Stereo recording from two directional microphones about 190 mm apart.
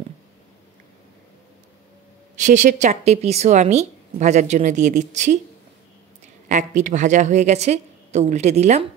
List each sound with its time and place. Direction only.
2.3 s speech: 40° right (ahead or behind)
6.5 s speech: 40° right (ahead or behind)